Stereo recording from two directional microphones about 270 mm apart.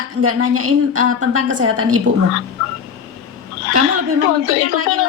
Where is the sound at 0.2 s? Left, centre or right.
Right.